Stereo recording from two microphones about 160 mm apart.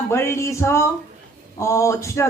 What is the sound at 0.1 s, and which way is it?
Speech, 15° left (ahead or behind).